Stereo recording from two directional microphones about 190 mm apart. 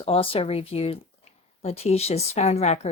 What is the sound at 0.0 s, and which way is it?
Speech, 30° left (ahead or behind).